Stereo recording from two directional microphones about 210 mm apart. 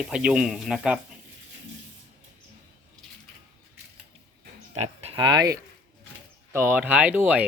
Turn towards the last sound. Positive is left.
turn(degrees=-5)  # may be behind; listen again after turning